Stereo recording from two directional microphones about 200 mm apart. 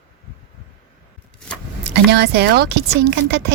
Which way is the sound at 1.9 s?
55° right (ahead or behind).